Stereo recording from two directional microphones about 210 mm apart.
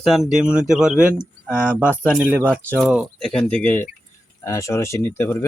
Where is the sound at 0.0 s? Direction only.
Centre (ahead or behind).